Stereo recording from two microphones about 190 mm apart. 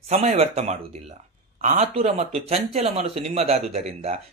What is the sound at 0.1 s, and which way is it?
Speech, 35° right (ahead or behind).